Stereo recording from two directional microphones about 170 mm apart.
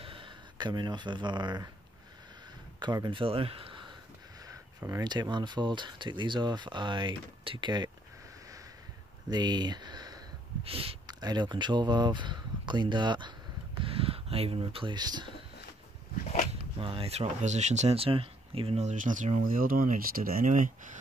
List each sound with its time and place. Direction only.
0.0 s speech: 30° right (ahead or behind)
2.8 s speech: 25° right (ahead or behind)
4.5 s speech: 20° right (ahead or behind)
9.3 s speech: 25° right (ahead or behind)
10.6 s speech: 35° right (ahead or behind)
16.7 s speech: 30° right (ahead or behind); by 20.7 s 50° right (ahead or behind)